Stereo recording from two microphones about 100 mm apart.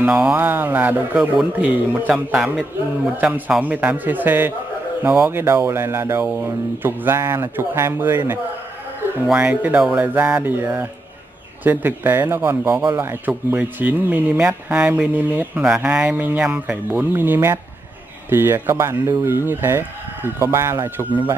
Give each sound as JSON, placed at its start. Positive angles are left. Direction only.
{"t": 0.0, "sound": "speech", "side_deg": -10}
{"t": 5.0, "sound": "speech", "side_deg": -10}
{"t": 5.3, "sound": "speech", "side_deg": -25}
{"t": 17.1, "sound": "speech", "side_deg": -20}